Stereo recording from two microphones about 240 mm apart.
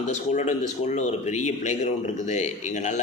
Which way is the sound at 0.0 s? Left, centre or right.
Left.